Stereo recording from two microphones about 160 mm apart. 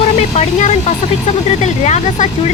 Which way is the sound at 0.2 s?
45° left (ahead or behind).